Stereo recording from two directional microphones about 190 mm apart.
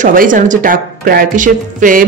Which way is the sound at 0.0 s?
45° right (ahead or behind).